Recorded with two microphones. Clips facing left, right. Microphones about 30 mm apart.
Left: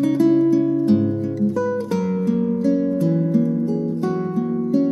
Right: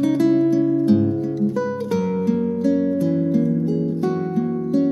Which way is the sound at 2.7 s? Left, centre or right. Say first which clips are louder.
Right 1 dB; centre.